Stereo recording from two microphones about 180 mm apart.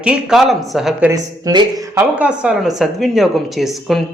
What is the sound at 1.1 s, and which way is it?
Speech, 20° right (ahead or behind).